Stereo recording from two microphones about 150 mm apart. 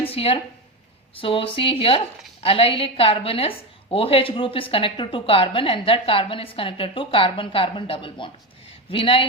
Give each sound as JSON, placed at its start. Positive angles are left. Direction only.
{"t": 0.1, "sound": "a woman's voice", "side_deg": 40}